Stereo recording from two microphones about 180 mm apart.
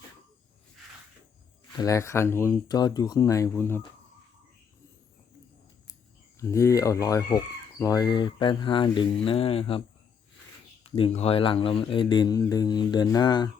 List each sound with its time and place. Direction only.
1.7 s speech: 20° left (ahead or behind)
6.4 s speech: 15° left (ahead or behind); by 9.8 s 30° left (ahead or behind)
10.8 s speech: 30° left (ahead or behind)